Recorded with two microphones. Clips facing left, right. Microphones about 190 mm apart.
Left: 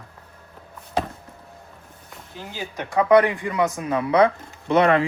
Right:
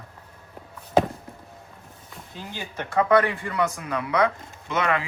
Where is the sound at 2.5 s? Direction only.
15° left (ahead or behind); by 5.0 s 30° left (ahead or behind).